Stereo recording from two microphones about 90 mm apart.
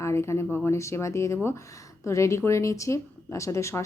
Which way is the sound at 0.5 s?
30° left (ahead or behind).